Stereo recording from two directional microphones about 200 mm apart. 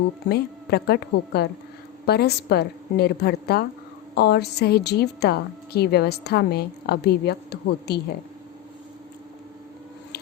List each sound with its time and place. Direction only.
0.3 s a woman's voice: 55° left (ahead or behind)